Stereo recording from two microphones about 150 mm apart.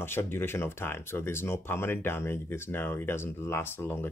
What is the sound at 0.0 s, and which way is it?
Speech, 15° left (ahead or behind).